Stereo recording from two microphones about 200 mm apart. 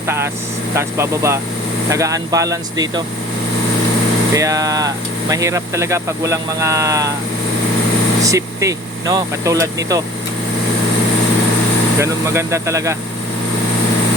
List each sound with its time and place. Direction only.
0.8 s speech: 15° right (ahead or behind)
4.4 s speech: 15° right (ahead or behind)
8.2 s speech: 15° right (ahead or behind)
11.9 s speech: 15° right (ahead or behind)